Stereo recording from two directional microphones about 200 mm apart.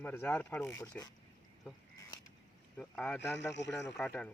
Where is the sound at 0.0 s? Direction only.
10° left (ahead or behind).